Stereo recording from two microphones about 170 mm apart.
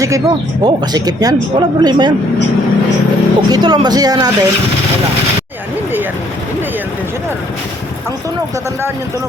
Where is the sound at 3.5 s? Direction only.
25° right (ahead or behind).